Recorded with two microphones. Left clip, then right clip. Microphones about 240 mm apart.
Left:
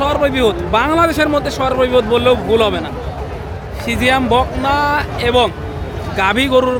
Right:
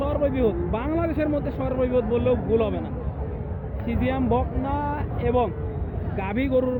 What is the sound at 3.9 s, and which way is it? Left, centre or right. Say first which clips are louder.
Speech: left 11 dB; centre.